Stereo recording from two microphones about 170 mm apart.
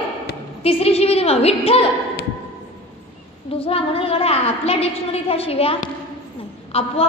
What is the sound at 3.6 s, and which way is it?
A woman's voice, 35° left (ahead or behind).